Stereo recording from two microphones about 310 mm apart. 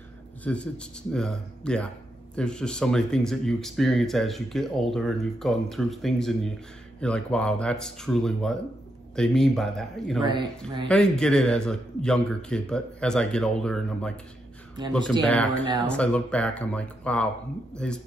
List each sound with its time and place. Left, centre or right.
0.4 s speech: centre